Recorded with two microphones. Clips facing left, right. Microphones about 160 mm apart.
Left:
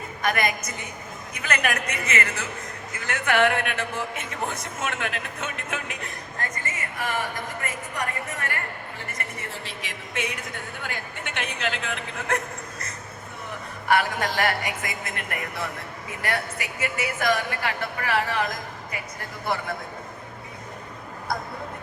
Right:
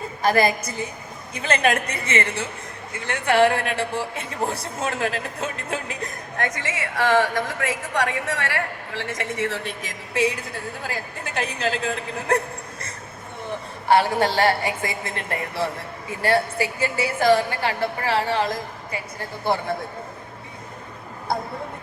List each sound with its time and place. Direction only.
0.2 s a man's voice: 30° right (ahead or behind)
6.3 s speech: 80° right
9.8 s a man's voice: 30° right (ahead or behind)